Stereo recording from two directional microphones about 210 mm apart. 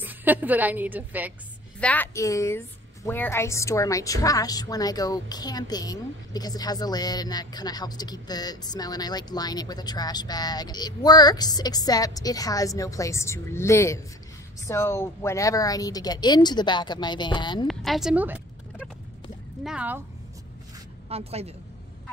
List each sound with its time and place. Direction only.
0.0 s a woman's voice: 10° right (ahead or behind)
1.8 s a woman's voice: 5° left (ahead or behind)
17.6 s speech: centre (ahead or behind)
21.1 s a woman's voice: 30° right (ahead or behind)